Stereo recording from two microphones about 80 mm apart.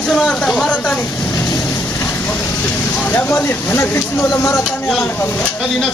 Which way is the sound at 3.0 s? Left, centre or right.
Left.